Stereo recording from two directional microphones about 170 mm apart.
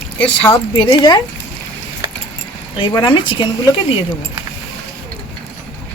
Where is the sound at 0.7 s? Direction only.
25° left (ahead or behind).